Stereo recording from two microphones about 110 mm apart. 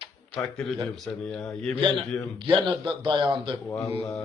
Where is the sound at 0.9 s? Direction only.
5° left (ahead or behind).